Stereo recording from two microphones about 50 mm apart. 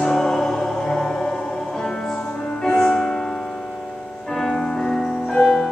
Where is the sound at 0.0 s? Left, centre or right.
Centre.